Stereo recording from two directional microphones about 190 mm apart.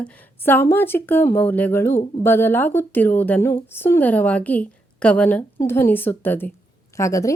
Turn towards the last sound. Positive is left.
turn(degrees=15)  # may be behind; listen again after turning